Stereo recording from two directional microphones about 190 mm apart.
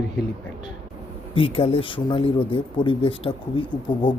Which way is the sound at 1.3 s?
30° left (ahead or behind).